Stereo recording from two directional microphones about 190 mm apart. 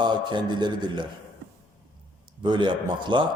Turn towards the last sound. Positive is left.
turn(degrees=-25)  # may be behind; listen again after turning